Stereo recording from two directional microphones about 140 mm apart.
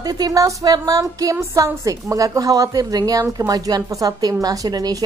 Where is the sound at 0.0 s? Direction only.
25° right (ahead or behind).